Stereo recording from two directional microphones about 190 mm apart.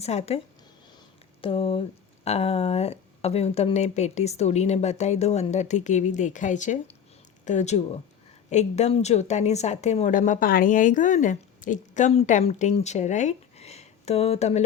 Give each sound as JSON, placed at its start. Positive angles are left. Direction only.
{"t": 0.0, "sound": "speech", "side_deg": 35}